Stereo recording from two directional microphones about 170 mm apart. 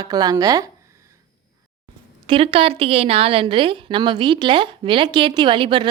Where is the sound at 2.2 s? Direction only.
30° right (ahead or behind).